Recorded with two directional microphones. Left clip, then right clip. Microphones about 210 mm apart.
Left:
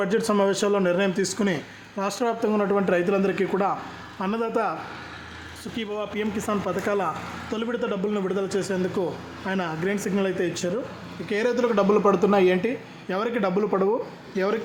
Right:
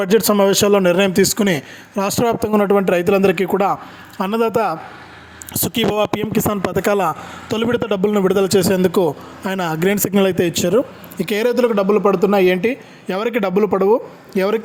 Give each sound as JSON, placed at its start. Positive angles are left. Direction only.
{"t": 0.0, "sound": "speech", "side_deg": -45}